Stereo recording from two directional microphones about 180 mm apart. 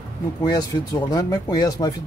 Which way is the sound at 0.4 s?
20° left (ahead or behind).